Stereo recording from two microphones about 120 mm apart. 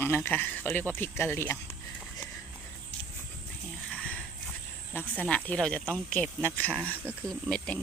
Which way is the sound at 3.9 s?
10° left (ahead or behind).